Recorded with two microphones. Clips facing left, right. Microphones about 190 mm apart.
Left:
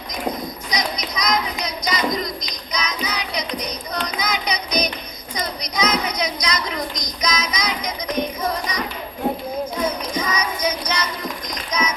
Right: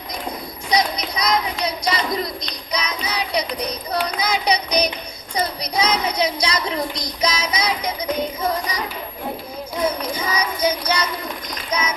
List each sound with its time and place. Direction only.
0.7 s child singing: 30° right (ahead or behind)
2.7 s music: 30° right (ahead or behind)
4.2 s hands: 30° right (ahead or behind)
5.3 s child singing: 30° right (ahead or behind)
8.2 s music: 30° right (ahead or behind)
10.1 s child singing: 30° right (ahead or behind)